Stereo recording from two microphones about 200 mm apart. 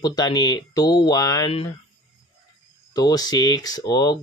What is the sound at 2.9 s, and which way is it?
Speech, 20° left (ahead or behind).